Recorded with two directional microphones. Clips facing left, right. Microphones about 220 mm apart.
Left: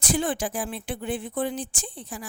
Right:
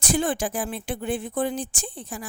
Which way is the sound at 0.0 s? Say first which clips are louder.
Right 2 dB; 45° right (ahead or behind).